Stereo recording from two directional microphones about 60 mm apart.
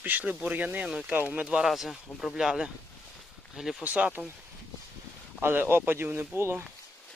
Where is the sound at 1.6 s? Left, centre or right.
Centre.